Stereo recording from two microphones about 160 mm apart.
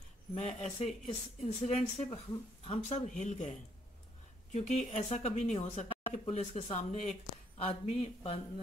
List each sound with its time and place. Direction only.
0.3 s speech: 40° left (ahead or behind)